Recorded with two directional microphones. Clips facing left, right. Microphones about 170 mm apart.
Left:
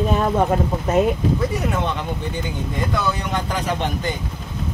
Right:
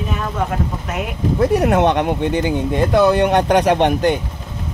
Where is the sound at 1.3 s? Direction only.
65° right (ahead or behind).